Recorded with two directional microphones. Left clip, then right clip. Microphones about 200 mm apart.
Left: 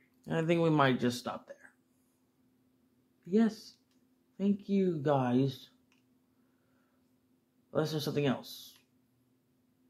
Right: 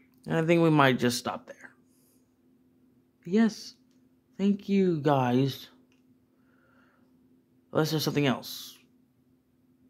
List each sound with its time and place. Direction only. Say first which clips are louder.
0.2 s speech: right 6 dB; 35° right (ahead or behind); by 1.7 s 50° right (ahead or behind)
3.3 s speech: right 4 dB; 45° right (ahead or behind)
7.7 s speech: right 5 dB; 50° right (ahead or behind)